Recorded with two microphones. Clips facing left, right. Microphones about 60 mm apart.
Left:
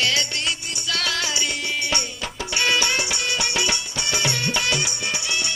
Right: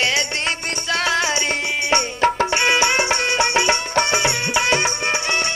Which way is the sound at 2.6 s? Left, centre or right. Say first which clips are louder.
Right 3 dB; right.